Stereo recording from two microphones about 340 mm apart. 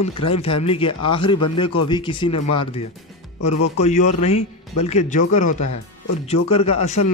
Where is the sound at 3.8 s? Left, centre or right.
Centre.